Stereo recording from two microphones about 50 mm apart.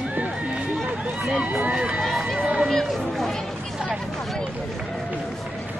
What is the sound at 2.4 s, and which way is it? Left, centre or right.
Run, right.